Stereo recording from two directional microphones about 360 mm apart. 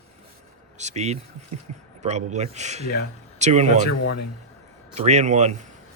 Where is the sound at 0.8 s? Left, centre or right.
Centre.